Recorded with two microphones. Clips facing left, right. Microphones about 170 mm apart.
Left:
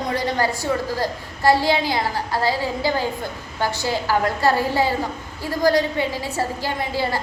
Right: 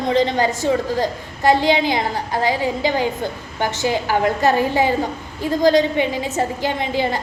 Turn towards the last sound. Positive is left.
turn(degrees=-20)  # may be behind; listen again after turning